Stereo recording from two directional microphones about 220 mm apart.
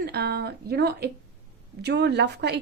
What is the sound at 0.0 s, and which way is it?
A woman's voice, 45° right (ahead or behind).